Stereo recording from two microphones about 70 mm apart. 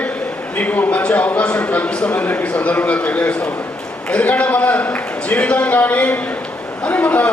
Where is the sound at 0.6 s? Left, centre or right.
Left.